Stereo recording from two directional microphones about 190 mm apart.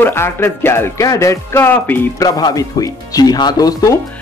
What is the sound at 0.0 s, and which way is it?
A man's voice, 10° left (ahead or behind).